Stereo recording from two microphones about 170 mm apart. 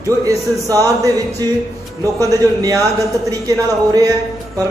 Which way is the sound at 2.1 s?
20° right (ahead or behind).